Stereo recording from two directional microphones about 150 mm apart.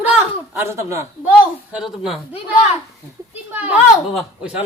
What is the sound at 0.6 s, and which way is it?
Speech, 15° right (ahead or behind).